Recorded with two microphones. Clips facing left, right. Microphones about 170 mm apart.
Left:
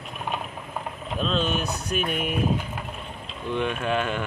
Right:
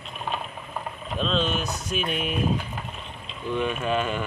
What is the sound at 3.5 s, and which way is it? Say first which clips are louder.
Speech: even; 10° right (ahead or behind).